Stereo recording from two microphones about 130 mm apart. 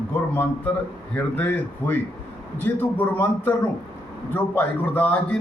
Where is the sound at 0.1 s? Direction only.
15° left (ahead or behind).